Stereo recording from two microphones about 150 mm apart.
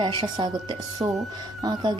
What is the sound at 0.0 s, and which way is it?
Speech, 30° right (ahead or behind).